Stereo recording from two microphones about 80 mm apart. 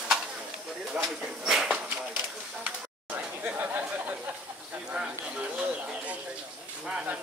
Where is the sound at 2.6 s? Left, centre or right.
Centre.